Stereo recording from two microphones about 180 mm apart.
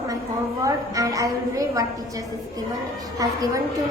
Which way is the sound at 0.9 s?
20° right (ahead or behind).